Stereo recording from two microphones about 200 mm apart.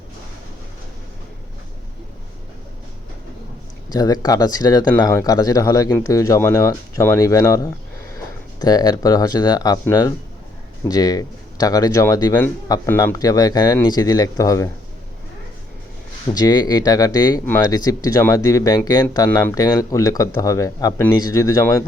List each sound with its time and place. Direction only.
3.8 s speech: 20° left (ahead or behind)
16.3 s speech: 20° left (ahead or behind)